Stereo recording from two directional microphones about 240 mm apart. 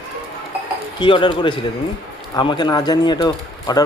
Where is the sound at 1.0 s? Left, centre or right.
Centre.